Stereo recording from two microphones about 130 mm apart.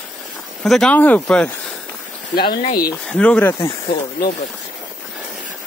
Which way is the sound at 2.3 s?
40° left (ahead or behind).